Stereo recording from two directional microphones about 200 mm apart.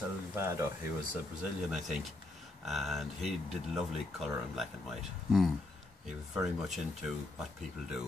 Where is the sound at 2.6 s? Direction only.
Centre (ahead or behind).